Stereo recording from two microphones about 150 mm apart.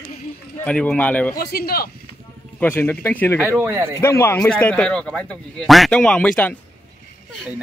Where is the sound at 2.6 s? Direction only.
15° left (ahead or behind).